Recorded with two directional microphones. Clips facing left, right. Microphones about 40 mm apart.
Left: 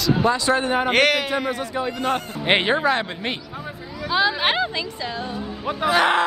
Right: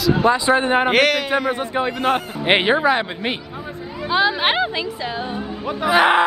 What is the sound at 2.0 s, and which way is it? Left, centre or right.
A man's voice, centre.